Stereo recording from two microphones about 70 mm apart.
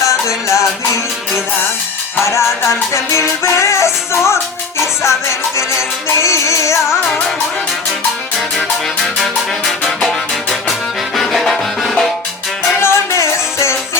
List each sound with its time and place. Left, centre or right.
0.0 s music: left
2.1 s music: left
8.4 s music: centre
12.8 s music: left